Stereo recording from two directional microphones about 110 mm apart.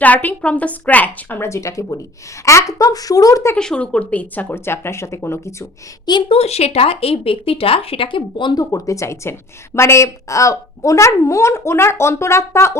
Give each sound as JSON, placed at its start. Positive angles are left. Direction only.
{"t": 0.0, "sound": "a woman's voice", "side_deg": 15}
{"t": 3.5, "sound": "a woman's voice", "side_deg": 10}
{"t": 6.2, "sound": "speech", "side_deg": 65}
{"t": 8.7, "sound": "a woman's voice", "side_deg": 30}